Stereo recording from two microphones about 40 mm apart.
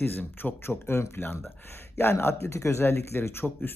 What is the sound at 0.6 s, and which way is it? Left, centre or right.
Speech, left.